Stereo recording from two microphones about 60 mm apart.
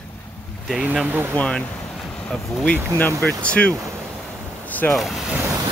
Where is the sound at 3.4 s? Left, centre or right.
Left.